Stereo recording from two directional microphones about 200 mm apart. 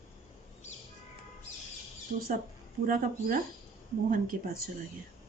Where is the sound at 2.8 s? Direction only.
45° right (ahead or behind).